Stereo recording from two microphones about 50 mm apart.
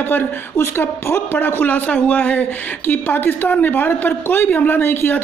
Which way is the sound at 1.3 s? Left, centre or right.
Left.